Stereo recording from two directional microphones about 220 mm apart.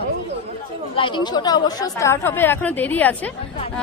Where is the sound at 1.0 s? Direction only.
20° left (ahead or behind).